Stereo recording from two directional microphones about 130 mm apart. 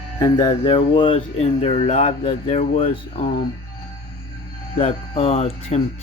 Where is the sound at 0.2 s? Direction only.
35° left (ahead or behind).